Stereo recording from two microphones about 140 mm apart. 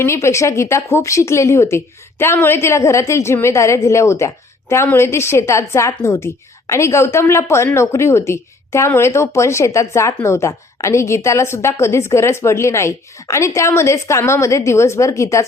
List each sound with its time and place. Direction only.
0.0 s a woman's voice: 20° left (ahead or behind)